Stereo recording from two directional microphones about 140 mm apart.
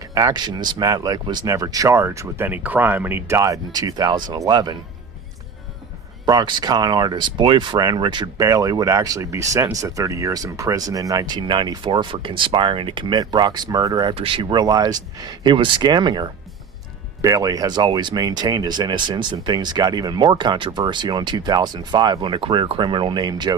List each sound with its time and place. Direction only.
0.1 s speech: 25° right (ahead or behind)
6.2 s speech: 30° right (ahead or behind)